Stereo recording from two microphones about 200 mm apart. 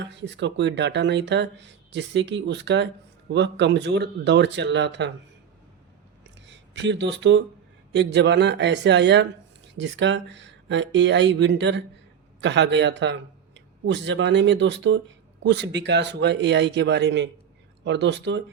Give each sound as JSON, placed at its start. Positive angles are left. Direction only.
{"t": 0.0, "sound": "speech", "side_deg": -60}
{"t": 6.4, "sound": "speech", "side_deg": -60}